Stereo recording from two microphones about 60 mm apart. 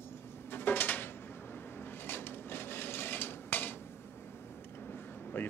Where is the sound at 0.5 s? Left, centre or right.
Left.